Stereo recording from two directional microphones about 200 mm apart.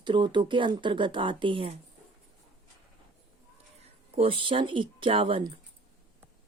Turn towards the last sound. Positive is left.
turn(degrees=-25)  # may be behind; listen again after turning